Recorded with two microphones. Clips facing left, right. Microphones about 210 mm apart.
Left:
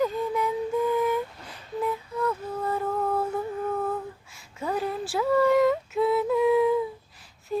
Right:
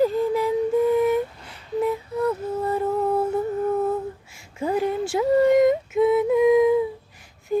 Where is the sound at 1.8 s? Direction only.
25° right (ahead or behind).